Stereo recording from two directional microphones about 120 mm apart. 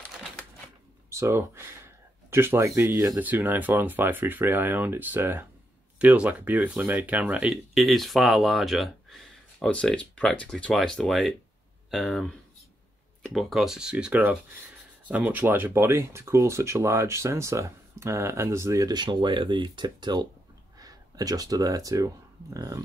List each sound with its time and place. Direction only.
1.1 s speech: 20° right (ahead or behind)
7.7 s speech: centre (ahead or behind); by 22.8 s 25° right (ahead or behind)